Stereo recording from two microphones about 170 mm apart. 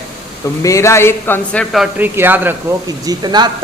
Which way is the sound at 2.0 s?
10° right (ahead or behind).